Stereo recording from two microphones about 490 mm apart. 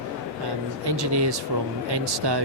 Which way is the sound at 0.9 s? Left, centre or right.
Right.